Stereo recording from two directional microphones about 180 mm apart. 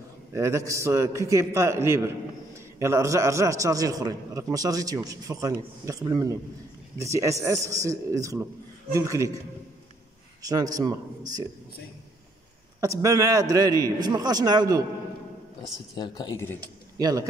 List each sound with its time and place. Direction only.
0.3 s a man's voice: 15° right (ahead or behind)
10.4 s a man's voice: 20° right (ahead or behind)
12.8 s a man's voice: 20° right (ahead or behind)
16.0 s speech: 25° left (ahead or behind)
16.5 s speech: 20° right (ahead or behind)